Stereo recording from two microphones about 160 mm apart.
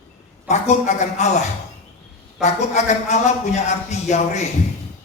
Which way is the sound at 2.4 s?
45° left (ahead or behind).